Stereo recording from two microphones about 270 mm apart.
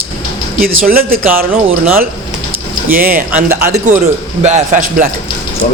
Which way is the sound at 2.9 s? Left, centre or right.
Right.